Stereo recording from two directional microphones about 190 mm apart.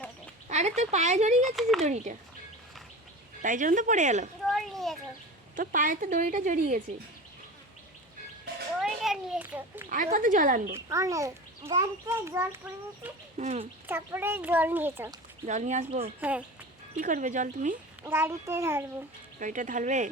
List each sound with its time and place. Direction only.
0.4 s speech: 35° right (ahead or behind)
3.4 s speech: 45° right (ahead or behind)
4.4 s a sound: centre (ahead or behind)
5.5 s a woman's voice: 45° right (ahead or behind)
8.8 s a sound: centre (ahead or behind)
9.9 s a woman's voice: 45° right (ahead or behind)
10.8 s a child's voice: 15° right (ahead or behind)
13.4 s speech: 35° right (ahead or behind)
13.8 s a child's voice: 10° right (ahead or behind)
15.4 s speech: 40° right (ahead or behind)
18.0 s a child's voice: 15° right (ahead or behind)
19.4 s speech: 40° right (ahead or behind)